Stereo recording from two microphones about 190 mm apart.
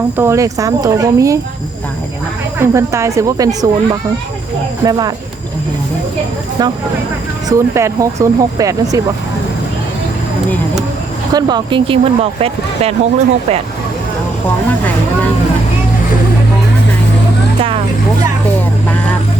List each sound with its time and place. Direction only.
0.2 s speech: 15° right (ahead or behind)
2.6 s speech: 15° right (ahead or behind)
6.6 s speech: 20° right (ahead or behind)
11.3 s speech: 20° right (ahead or behind)